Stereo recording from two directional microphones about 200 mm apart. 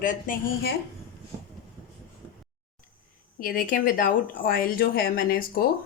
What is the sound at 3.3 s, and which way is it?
Speech, 45° left (ahead or behind).